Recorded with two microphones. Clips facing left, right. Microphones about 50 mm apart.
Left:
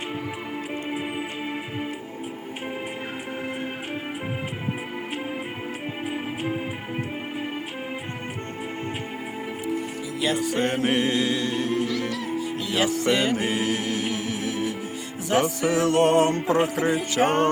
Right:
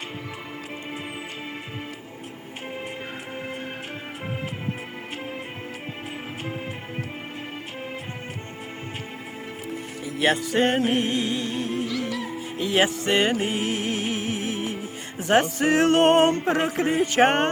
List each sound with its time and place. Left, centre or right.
10.5 s music: right
10.8 s mantra: left
11.5 s music: left
12.4 s music: right